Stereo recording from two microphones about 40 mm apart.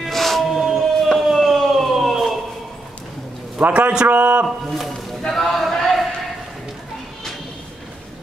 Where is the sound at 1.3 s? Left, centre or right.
Centre.